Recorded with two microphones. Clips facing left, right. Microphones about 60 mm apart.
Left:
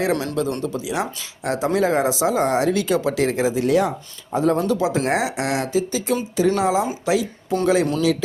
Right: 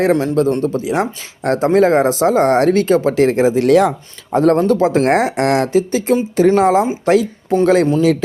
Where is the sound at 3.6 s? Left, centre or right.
Right.